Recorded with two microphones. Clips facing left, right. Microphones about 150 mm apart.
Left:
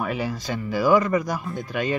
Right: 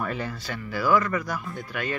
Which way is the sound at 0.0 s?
10° left (ahead or behind).